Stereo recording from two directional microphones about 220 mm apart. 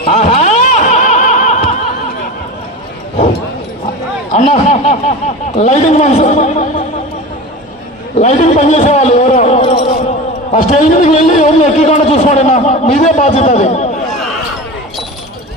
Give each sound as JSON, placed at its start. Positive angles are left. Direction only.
{"t": 0.0, "sound": "music", "side_deg": 30}
{"t": 4.3, "sound": "speech", "side_deg": 35}
{"t": 8.2, "sound": "speech", "side_deg": 30}